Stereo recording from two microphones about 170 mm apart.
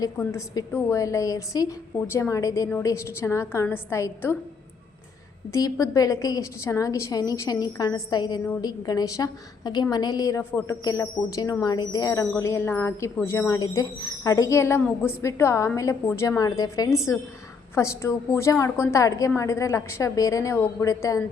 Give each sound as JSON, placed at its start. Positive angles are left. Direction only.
{"t": 0.2, "sound": "a woman's voice", "side_deg": 15}
{"t": 5.5, "sound": "a woman's voice", "side_deg": 20}